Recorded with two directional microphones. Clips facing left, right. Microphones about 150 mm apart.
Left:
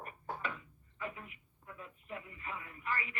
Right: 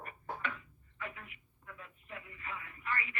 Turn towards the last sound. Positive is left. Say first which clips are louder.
# even
turn(degrees=35)  # may be behind; listen again after turning